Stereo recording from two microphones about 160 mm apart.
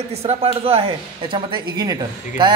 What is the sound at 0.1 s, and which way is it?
Speech, 40° right (ahead or behind).